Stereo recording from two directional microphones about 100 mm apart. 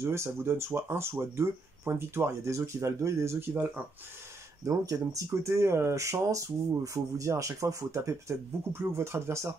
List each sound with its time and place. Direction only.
0.0 s speech: 25° right (ahead or behind)
4.6 s speech: 35° right (ahead or behind)